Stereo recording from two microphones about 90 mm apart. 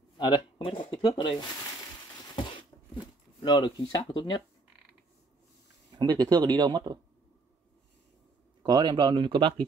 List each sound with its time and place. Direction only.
0.2 s speech: 55° left (ahead or behind); by 1.4 s 75° left (ahead or behind)
3.3 s speech: 55° left (ahead or behind)
4.1 s speech: 55° left (ahead or behind)
5.9 s speech: 55° right (ahead or behind)
8.6 s speech: 55° right (ahead or behind)